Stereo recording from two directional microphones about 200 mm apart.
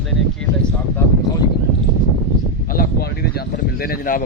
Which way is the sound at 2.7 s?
50° left (ahead or behind).